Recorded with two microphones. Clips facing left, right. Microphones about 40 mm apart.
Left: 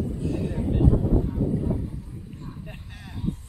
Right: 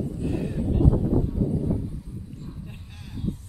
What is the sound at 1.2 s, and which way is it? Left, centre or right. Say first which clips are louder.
Speech: even; left.